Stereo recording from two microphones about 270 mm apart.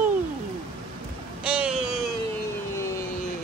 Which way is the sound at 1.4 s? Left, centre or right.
Centre.